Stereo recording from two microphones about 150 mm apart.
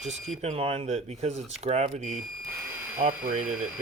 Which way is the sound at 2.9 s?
70° right (ahead or behind).